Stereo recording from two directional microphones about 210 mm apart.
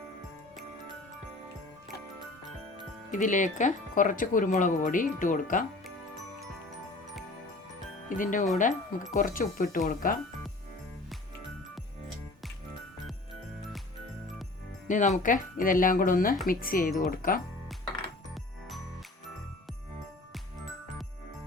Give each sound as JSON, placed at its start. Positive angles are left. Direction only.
{"t": 3.1, "sound": "speech", "side_deg": 35}
{"t": 8.1, "sound": "speech", "side_deg": 40}
{"t": 14.8, "sound": "speech", "side_deg": 35}